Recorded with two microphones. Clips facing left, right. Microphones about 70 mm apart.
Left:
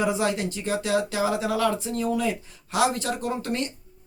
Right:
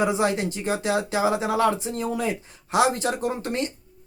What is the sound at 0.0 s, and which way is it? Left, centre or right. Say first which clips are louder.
Speech: right 2 dB; right.